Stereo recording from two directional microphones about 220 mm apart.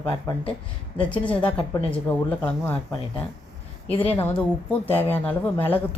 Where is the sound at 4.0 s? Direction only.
10° left (ahead or behind).